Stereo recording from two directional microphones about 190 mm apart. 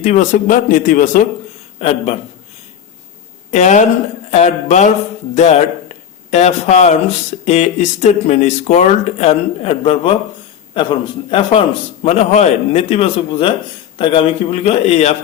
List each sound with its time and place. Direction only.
0.0 s a man's voice: 40° left (ahead or behind)
1.8 s speech: 30° left (ahead or behind)
3.5 s speech: 40° left (ahead or behind)
11.3 s speech: 25° left (ahead or behind)